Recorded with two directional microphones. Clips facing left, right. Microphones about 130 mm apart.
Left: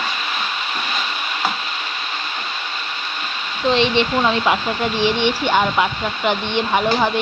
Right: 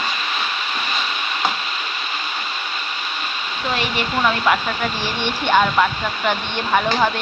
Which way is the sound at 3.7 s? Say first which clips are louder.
Left 6 dB; 25° left (ahead or behind).